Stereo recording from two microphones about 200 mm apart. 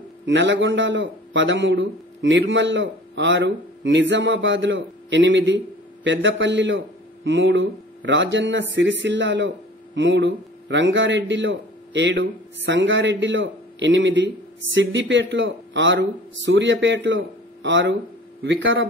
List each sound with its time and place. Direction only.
0.2 s a man's voice: 65° right (ahead or behind)